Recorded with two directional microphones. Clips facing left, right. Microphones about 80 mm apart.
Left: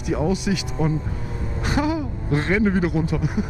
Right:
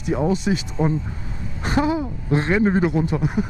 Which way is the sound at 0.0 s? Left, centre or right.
Right.